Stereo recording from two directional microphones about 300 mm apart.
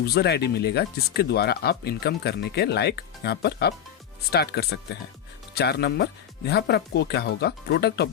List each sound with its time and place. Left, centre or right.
0.0 s speech: left